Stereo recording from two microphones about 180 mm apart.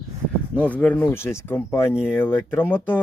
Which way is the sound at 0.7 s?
10° left (ahead or behind).